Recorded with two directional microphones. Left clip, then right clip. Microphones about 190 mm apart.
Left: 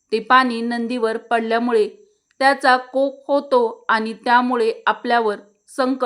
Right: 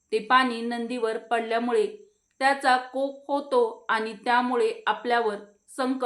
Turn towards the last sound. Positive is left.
turn(degrees=45)  # may be behind; listen again after turning